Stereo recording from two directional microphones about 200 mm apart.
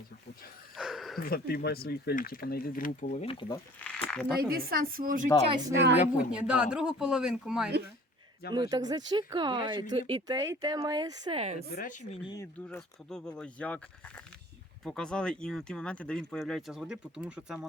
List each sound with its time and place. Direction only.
0.8 s a sound: centre (ahead or behind)
1.2 s speech: 50° left (ahead or behind); by 3.6 s 25° left (ahead or behind)
3.8 s speech: 5° left (ahead or behind)
4.4 s a woman's voice: 50° right (ahead or behind)
5.7 s a woman's voice: 60° right (ahead or behind)
6.3 s speech: 5° right (ahead or behind)
8.5 s speech: 20° right (ahead or behind)
11.3 s speech: 30° right (ahead or behind)
11.7 s speech: 40° left (ahead or behind)
12.6 s speech: 5° left (ahead or behind)